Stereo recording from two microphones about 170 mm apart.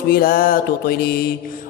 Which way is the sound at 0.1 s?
60° left (ahead or behind).